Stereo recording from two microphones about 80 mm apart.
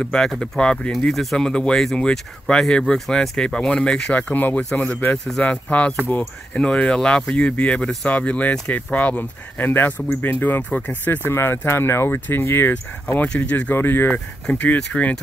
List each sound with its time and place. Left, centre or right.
0.0 s speech: centre; by 12.7 s left
13.3 s speech: centre